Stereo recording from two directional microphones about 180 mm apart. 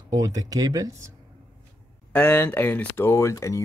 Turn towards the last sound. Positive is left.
turn(degrees=15)  # may be behind; listen again after turning